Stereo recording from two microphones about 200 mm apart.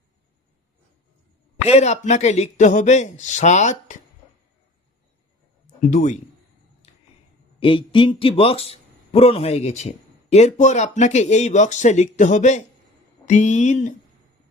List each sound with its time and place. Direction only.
1.6 s a man's voice: 35° left (ahead or behind)
5.8 s a man's voice: 40° left (ahead or behind)
6.8 s a sound: 30° left (ahead or behind)
7.6 s a man's voice: 25° left (ahead or behind)